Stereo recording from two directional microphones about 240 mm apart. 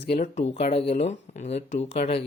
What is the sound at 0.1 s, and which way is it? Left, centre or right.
Speech, left.